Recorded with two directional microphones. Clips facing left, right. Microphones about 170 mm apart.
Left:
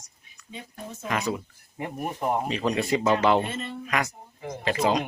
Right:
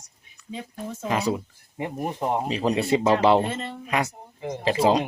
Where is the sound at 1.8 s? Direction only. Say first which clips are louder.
Right 2 dB; 20° right (ahead or behind).